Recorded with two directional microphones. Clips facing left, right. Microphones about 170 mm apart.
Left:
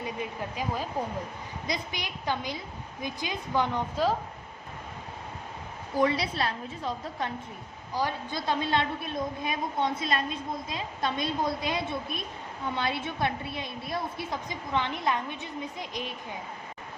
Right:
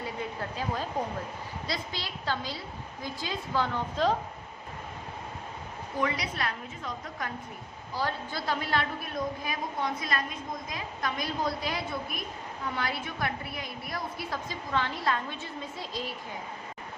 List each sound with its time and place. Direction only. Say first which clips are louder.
0.0 s a woman's voice: left 1 dB; 15° left (ahead or behind)
6.0 s a woman's voice: left 5 dB; 30° left (ahead or behind)
7.9 s a woman's voice: left 2 dB; 15° left (ahead or behind)